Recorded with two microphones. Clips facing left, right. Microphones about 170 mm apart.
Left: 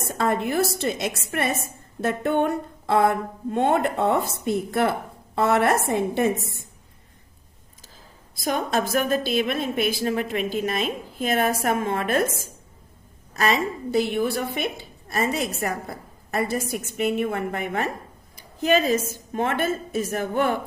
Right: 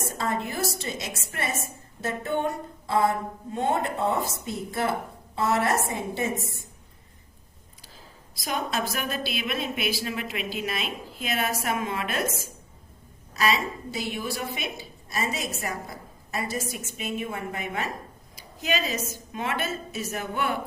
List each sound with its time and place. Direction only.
0.2 s a woman's voice: 60° left (ahead or behind)
8.4 s a woman's voice: 50° left (ahead or behind)
13.3 s a woman's voice: 50° left (ahead or behind)
18.3 s a sound: 50° left (ahead or behind)
19.3 s a woman's voice: 50° left (ahead or behind)